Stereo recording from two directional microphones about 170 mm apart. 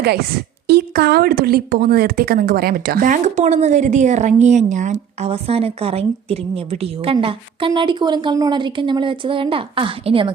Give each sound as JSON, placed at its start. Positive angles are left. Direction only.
{"t": 0.7, "sound": "a woman's voice", "side_deg": -70}